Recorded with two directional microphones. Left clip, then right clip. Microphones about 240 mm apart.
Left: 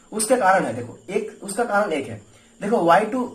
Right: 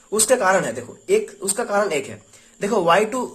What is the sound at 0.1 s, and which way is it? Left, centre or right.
Speech, right.